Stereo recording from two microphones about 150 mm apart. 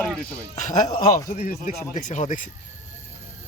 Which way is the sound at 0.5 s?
55° left (ahead or behind).